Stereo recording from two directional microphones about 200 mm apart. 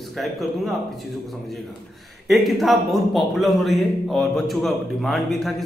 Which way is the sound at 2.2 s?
Centre (ahead or behind).